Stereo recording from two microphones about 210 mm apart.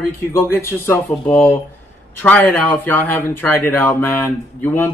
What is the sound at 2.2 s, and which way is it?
Speech, 10° left (ahead or behind).